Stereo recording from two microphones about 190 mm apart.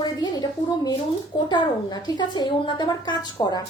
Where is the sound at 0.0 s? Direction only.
20° left (ahead or behind).